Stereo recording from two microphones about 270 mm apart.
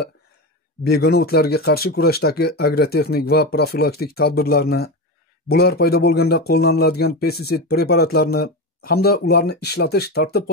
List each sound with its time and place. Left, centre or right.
0.8 s speech: left